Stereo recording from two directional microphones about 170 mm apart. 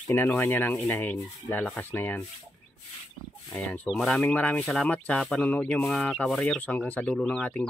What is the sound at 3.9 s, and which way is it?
Speech, centre (ahead or behind).